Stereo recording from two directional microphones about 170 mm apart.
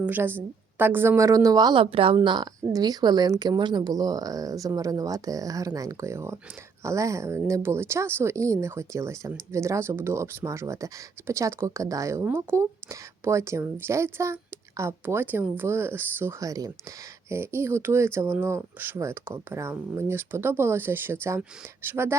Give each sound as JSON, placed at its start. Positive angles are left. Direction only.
{"t": 0.0, "sound": "speech", "side_deg": -10}